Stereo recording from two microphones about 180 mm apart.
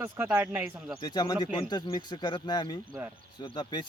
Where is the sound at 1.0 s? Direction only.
25° left (ahead or behind).